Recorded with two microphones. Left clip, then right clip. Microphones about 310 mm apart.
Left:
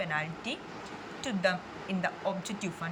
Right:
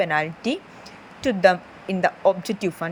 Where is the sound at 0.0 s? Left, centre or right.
Centre.